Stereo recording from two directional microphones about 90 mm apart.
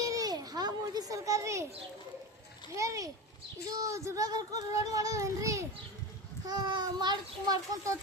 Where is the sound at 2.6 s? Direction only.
35° right (ahead or behind).